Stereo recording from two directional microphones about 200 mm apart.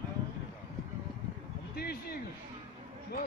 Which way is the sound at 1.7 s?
50° left (ahead or behind).